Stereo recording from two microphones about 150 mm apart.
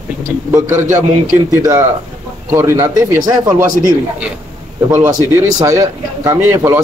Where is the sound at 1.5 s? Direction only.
20° right (ahead or behind).